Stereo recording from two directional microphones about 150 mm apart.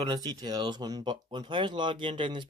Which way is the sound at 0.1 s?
25° right (ahead or behind).